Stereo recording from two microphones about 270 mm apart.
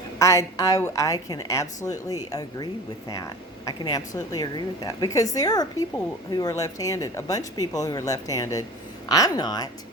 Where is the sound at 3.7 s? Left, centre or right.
Centre.